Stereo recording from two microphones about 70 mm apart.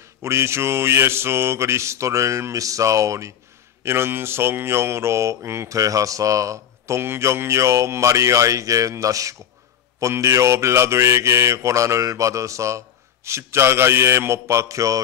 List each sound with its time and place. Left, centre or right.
0.2 s speech: right
3.8 s mantra: right
7.0 s speech: right